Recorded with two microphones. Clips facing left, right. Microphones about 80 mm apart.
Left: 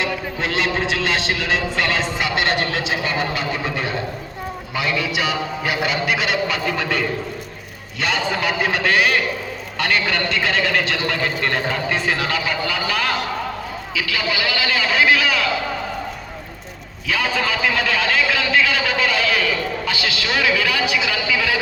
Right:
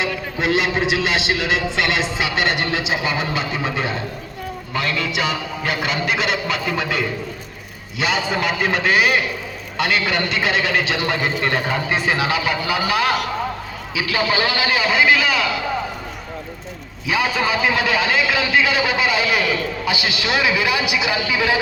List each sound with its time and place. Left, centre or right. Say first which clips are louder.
0.3 s a man's voice: right 4 dB; centre
11.0 s a man's voice: right 1 dB; centre
13.9 s a man's voice: right 3 dB; right
14.8 s a man's voice: even; centre
17.1 s a man's voice: right 2 dB; centre